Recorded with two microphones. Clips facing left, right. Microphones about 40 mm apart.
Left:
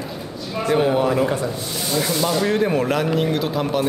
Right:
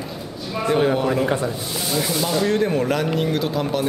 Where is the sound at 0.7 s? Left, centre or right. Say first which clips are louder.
Left 1 dB; centre.